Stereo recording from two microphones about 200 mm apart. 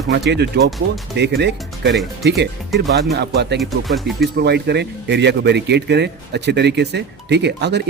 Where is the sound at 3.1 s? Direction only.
55° right (ahead or behind).